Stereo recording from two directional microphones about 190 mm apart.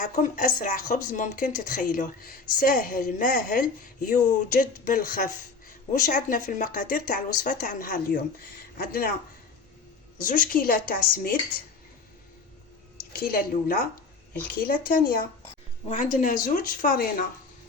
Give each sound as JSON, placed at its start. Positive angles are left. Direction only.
{"t": 0.0, "sound": "speech", "side_deg": 40}
{"t": 10.2, "sound": "speech", "side_deg": 45}
{"t": 13.1, "sound": "speech", "side_deg": 50}